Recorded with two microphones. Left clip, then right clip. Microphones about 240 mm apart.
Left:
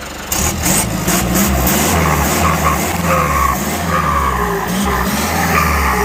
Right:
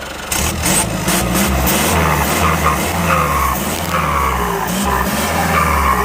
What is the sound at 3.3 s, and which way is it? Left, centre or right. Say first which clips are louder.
Music: left 1 dB; centre.